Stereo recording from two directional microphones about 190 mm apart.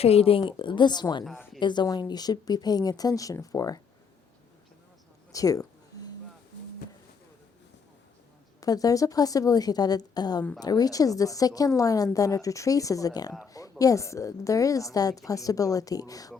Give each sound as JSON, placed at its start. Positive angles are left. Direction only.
{"t": 0.0, "sound": "speech", "side_deg": 30}
{"t": 5.3, "sound": "a sound", "side_deg": 20}
{"t": 8.6, "sound": "a woman's voice", "side_deg": 20}